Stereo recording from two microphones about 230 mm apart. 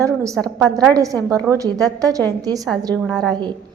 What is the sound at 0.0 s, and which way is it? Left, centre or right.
Speech, centre.